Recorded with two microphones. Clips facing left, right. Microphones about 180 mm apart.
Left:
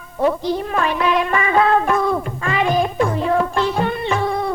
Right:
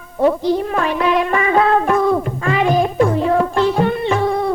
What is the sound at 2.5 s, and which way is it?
Music, 50° right (ahead or behind).